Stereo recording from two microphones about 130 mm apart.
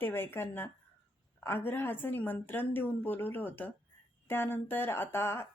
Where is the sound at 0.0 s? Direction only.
15° left (ahead or behind).